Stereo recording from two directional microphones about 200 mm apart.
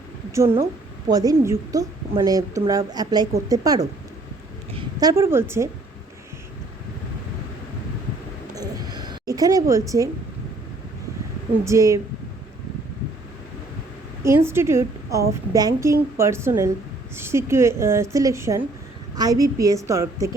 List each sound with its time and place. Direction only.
0.3 s a woman's voice: 15° right (ahead or behind)
8.5 s a sound: 20° right (ahead or behind)
11.6 s a woman's voice: 15° right (ahead or behind)
14.3 s a woman's voice: 10° right (ahead or behind)